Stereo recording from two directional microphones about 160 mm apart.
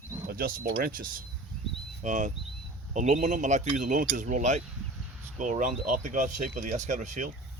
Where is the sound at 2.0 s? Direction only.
50° right (ahead or behind).